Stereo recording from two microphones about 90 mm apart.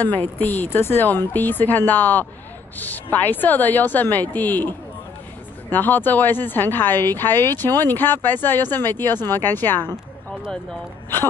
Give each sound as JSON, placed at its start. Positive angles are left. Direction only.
{"t": 0.0, "sound": "speech", "side_deg": 20}